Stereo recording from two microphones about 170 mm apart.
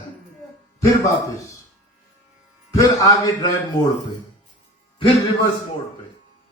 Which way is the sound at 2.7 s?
20° left (ahead or behind).